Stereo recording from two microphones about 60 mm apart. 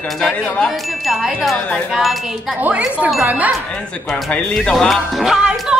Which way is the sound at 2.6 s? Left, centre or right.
Right.